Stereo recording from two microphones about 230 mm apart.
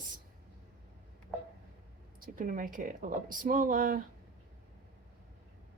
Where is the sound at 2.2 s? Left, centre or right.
Right.